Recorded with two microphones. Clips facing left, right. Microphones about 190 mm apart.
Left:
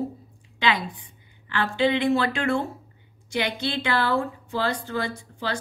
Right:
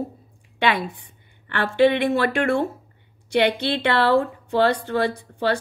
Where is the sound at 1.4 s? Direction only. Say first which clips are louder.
Right 5 dB; 55° right (ahead or behind).